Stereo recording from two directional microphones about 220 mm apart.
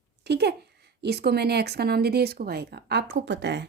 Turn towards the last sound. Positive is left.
turn(degrees=-50)  # may be behind; listen again after turning